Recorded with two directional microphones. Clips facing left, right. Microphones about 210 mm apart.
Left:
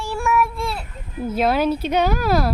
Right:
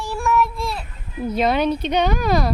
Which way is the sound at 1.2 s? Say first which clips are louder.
Even; 5° left (ahead or behind).